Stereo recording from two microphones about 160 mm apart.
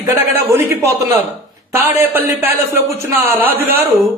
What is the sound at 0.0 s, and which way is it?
A man's voice, 15° right (ahead or behind).